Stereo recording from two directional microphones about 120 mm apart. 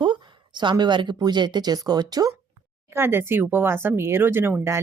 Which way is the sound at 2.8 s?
20° right (ahead or behind).